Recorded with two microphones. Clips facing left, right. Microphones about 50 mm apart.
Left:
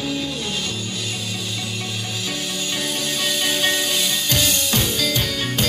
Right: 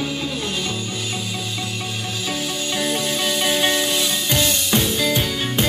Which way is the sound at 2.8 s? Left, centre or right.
Centre.